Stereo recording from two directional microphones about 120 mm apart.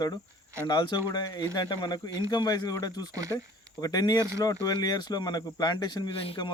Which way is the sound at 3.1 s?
25° right (ahead or behind).